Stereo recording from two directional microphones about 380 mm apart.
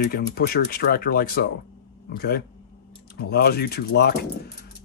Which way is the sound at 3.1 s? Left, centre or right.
Left.